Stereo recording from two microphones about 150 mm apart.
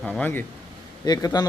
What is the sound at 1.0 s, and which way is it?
Speech, 25° left (ahead or behind).